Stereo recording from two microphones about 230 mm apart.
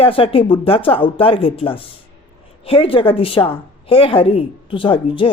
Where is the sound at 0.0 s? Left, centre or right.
Left.